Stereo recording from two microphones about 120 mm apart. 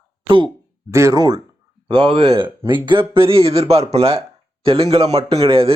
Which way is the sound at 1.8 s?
45° right (ahead or behind).